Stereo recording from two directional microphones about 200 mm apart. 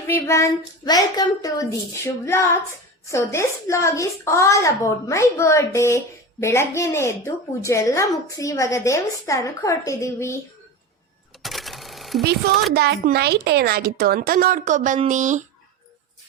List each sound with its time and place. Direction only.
0.1 s a woman's voice: 15° left (ahead or behind)
11.4 s sewing machine: centre (ahead or behind)
12.7 s a woman's voice: 55° right (ahead or behind)